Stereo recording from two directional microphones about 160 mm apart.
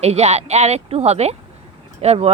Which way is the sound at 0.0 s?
40° right (ahead or behind).